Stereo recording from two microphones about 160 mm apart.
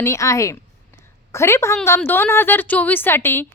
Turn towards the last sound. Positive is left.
turn(degrees=15)  # may be behind; listen again after turning